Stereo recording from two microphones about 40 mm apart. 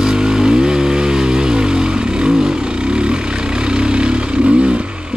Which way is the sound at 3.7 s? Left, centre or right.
Right.